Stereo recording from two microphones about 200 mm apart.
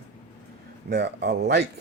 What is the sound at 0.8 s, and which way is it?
Speech, 60° right (ahead or behind).